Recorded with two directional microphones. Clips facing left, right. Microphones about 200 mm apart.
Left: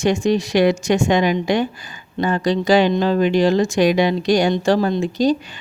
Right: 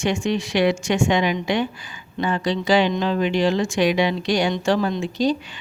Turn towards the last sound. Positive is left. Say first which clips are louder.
# left 4 dB
turn(degrees=40)  # may be behind; listen again after turning